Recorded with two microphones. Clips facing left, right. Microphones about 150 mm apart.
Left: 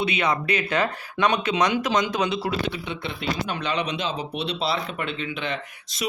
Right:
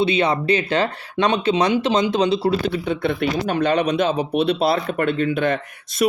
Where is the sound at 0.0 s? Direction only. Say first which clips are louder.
Right 6 dB; 30° right (ahead or behind).